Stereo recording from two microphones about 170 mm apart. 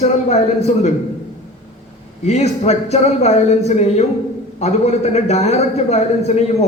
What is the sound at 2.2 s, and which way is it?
A man's voice, 40° left (ahead or behind).